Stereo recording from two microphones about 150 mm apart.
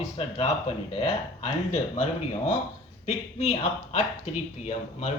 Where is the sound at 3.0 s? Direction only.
45° left (ahead or behind).